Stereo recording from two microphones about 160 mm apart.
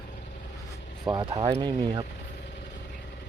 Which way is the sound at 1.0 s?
25° right (ahead or behind).